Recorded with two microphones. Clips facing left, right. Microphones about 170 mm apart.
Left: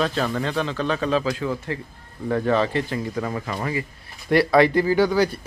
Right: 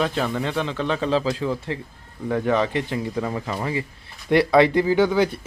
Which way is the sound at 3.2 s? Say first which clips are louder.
Right 1 dB; 10° right (ahead or behind).